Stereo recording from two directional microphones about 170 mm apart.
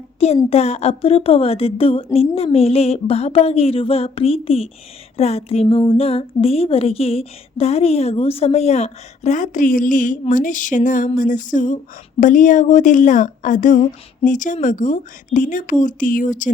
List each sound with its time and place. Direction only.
0.5 s speech: 40° left (ahead or behind)